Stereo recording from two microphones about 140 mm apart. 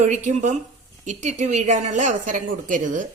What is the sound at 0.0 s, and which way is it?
A woman's voice, 60° right (ahead or behind).